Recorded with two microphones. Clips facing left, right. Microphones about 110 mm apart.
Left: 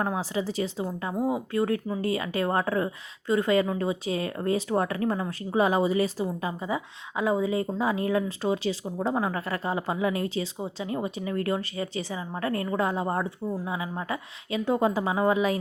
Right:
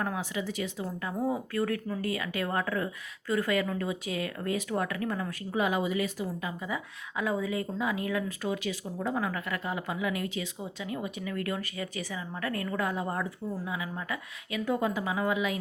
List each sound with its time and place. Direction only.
0.0 s a woman's voice: 30° left (ahead or behind)
0.9 s speech: 15° left (ahead or behind)
2.0 s a woman's voice: 30° left (ahead or behind)